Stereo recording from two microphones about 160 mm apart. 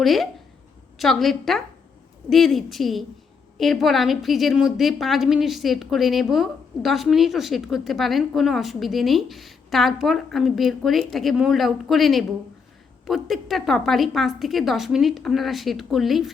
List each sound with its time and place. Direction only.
0.0 s a woman's voice: centre (ahead or behind)